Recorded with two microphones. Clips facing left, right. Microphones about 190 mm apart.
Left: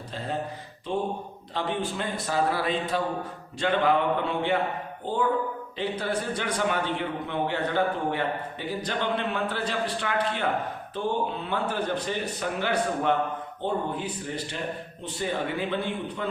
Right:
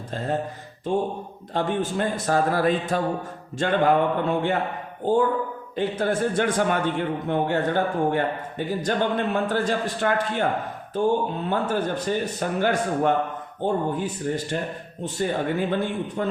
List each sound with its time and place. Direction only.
0.1 s a man's voice: 45° right (ahead or behind)